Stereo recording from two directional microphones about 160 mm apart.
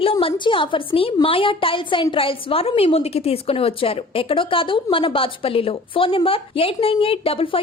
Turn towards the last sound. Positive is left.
turn(degrees=35)  # may be behind; listen again after turning